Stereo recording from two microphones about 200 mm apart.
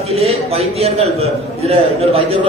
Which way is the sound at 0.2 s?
30° right (ahead or behind).